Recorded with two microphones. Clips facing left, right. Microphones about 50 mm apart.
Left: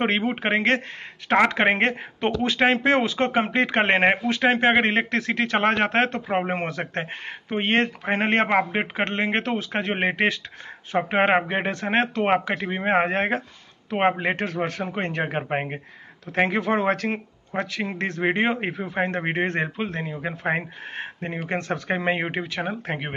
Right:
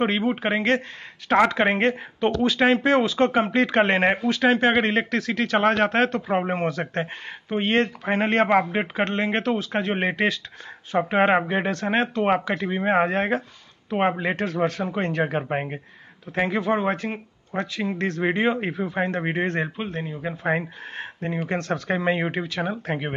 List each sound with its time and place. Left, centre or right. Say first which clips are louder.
0.2 s speech: even; left
15.5 s speech: even; left
17.6 s speech: right 1 dB; left
19.8 s speech: left 1 dB; left
20.4 s speech: right 2 dB; left